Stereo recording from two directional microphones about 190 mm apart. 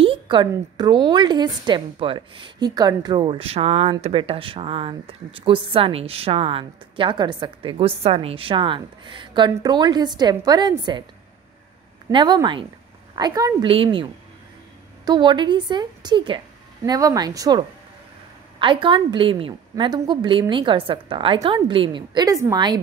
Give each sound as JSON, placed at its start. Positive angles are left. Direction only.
{"t": 0.0, "sound": "a woman's voice", "side_deg": -25}
{"t": 12.1, "sound": "a woman's voice", "side_deg": -25}
{"t": 15.0, "sound": "a woman's voice", "side_deg": -25}